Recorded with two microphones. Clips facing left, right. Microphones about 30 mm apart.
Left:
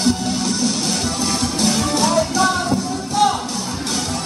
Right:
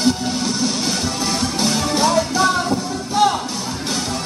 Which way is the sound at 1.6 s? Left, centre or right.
Centre.